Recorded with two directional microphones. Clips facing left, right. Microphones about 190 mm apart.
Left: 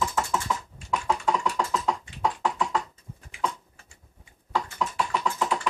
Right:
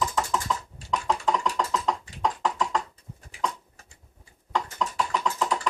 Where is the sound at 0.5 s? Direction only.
10° left (ahead or behind).